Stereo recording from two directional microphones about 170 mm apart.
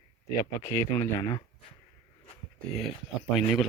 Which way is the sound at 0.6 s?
15° left (ahead or behind).